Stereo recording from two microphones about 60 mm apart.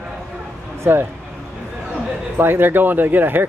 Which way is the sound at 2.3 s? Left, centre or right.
Right.